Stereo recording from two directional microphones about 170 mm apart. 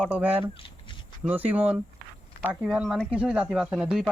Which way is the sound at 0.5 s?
30° left (ahead or behind).